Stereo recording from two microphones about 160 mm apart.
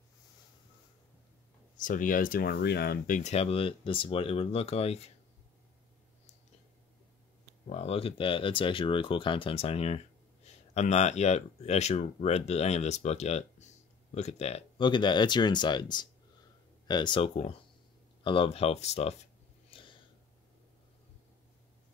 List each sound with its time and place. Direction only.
1.8 s speech: 55° left (ahead or behind); by 3.2 s 75° left (ahead or behind)
3.2 s speech: 45° left (ahead or behind)
7.6 s speech: 40° left (ahead or behind)
14.8 s speech: 30° left (ahead or behind)
17.3 s speech: 40° left (ahead or behind)
19.7 s a sound: 30° left (ahead or behind)